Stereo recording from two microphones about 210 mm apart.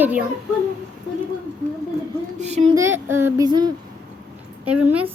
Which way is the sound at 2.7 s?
10° right (ahead or behind).